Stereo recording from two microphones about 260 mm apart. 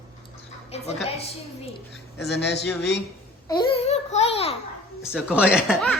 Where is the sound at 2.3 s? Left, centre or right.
Left.